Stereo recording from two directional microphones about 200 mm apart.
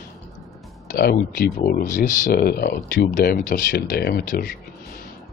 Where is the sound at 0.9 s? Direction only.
50° left (ahead or behind).